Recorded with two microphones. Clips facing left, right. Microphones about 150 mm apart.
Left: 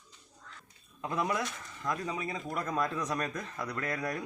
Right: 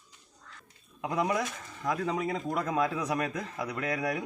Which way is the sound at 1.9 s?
70° right (ahead or behind).